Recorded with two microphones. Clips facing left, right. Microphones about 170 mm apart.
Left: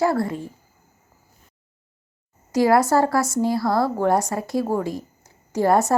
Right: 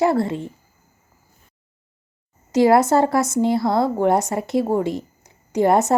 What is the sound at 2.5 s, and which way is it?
A woman's voice, 25° right (ahead or behind).